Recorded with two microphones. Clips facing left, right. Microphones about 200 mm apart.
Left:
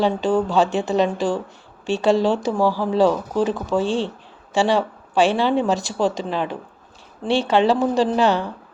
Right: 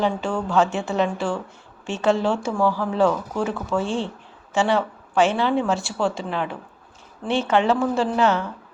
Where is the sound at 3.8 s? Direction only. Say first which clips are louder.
Left 3 dB; 15° right (ahead or behind).